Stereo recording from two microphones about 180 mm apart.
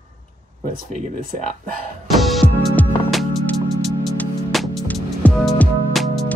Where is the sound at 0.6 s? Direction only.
50° right (ahead or behind).